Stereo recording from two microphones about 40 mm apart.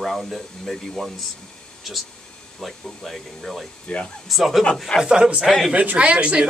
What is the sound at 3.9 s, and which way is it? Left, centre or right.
Speech, left.